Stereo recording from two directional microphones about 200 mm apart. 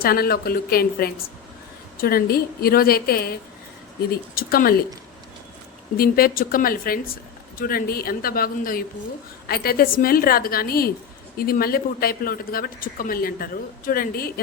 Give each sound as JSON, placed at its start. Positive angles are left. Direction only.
{"t": 0.0, "sound": "speech", "side_deg": 50}
{"t": 4.4, "sound": "speech", "side_deg": 45}
{"t": 6.0, "sound": "speech", "side_deg": 50}